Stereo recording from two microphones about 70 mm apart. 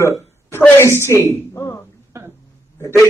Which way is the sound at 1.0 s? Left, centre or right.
Left.